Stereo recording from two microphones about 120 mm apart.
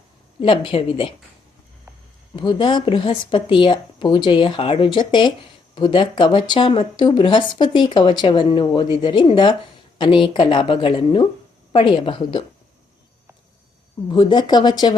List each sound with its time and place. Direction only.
0.4 s speech: 45° left (ahead or behind)
2.3 s speech: 40° left (ahead or behind)
14.1 s speech: 40° left (ahead or behind)